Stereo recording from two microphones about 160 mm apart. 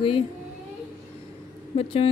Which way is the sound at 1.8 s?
40° left (ahead or behind).